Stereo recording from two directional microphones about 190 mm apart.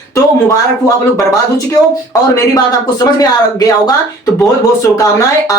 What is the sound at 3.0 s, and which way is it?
Speech, 20° left (ahead or behind).